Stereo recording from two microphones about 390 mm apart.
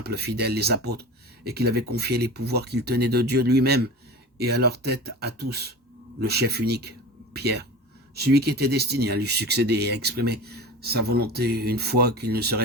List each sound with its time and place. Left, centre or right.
0.0 s speech: right